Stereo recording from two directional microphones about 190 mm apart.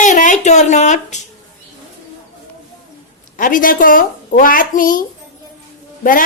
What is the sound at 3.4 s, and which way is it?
A woman's voice, 45° left (ahead or behind).